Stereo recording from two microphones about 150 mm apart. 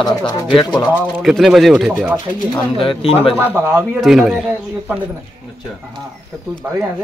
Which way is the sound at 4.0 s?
Centre (ahead or behind).